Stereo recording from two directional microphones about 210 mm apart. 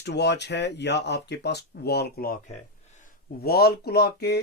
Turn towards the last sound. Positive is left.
turn(degrees=50)  # may be behind; listen again after turning